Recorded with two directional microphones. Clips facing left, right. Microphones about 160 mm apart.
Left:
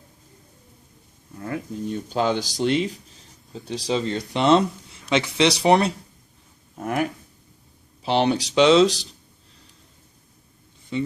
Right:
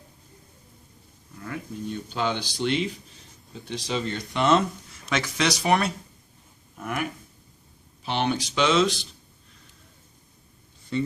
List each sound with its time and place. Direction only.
1.4 s speech: 35° left (ahead or behind)